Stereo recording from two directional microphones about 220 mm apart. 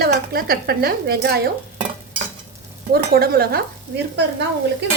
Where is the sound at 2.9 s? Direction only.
45° right (ahead or behind).